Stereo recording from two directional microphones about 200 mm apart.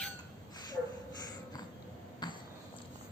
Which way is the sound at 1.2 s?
20° left (ahead or behind).